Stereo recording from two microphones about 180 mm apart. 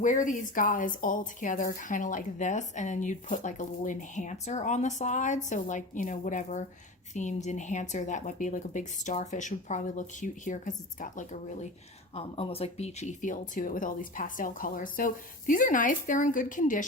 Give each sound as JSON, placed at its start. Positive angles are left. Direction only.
{"t": 0.0, "sound": "a woman's voice", "side_deg": 45}
{"t": 12.1, "sound": "a woman's voice", "side_deg": 30}